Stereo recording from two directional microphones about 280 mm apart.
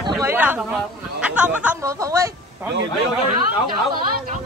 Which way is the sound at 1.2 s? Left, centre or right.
Centre.